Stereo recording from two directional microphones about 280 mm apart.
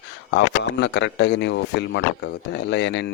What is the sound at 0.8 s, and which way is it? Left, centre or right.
Speech, left.